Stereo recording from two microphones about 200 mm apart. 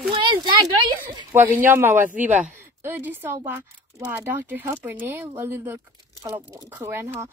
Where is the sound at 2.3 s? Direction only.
40° right (ahead or behind).